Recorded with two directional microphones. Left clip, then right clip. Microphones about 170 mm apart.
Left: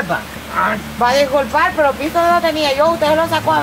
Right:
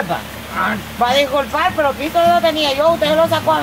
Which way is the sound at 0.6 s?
10° left (ahead or behind).